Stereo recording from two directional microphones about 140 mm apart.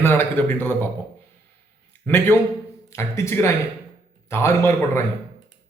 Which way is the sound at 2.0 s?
15° left (ahead or behind).